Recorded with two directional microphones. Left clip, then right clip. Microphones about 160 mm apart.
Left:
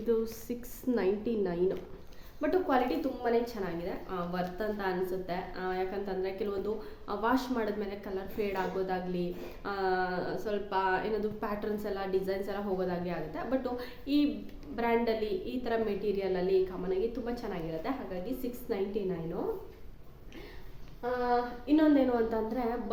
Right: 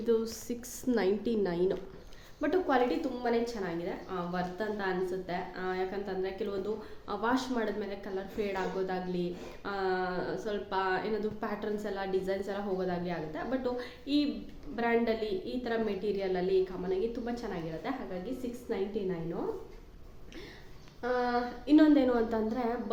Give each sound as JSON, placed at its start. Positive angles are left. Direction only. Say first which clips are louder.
{"t": 0.0, "sound": "a woman's voice", "louder": "right 1 dB", "side_deg": -10}
{"t": 2.4, "sound": "a woman's voice", "louder": "even", "side_deg": 0}
{"t": 21.7, "sound": "a woman's voice", "louder": "right 2 dB", "side_deg": -25}